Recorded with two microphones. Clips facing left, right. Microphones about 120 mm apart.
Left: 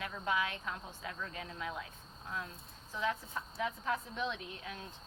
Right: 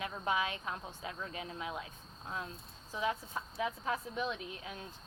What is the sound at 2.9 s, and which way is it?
A woman's voice, 15° right (ahead or behind).